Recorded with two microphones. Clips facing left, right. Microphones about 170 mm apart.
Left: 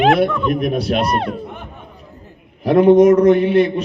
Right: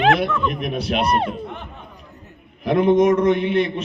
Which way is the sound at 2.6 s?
35° left (ahead or behind).